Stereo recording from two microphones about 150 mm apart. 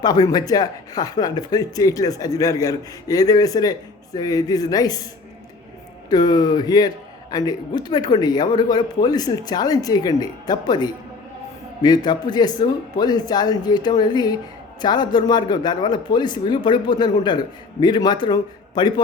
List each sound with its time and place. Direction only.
0.0 s speech: 25° left (ahead or behind)
6.1 s speech: 25° left (ahead or behind)